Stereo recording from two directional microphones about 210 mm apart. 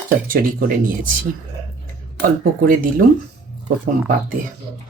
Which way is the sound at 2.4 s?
40° right (ahead or behind).